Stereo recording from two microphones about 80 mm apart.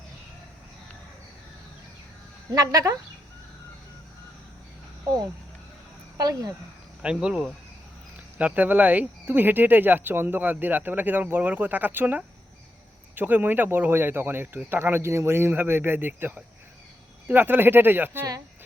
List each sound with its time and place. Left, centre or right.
2.5 s speech: right
6.1 s speech: right
7.0 s speech: centre
8.4 s speech: centre